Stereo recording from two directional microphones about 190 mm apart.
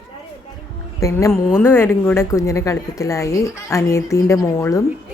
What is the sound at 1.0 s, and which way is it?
A woman's voice, 15° left (ahead or behind).